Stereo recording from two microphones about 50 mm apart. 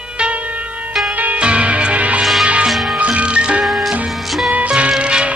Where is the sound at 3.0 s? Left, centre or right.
Right.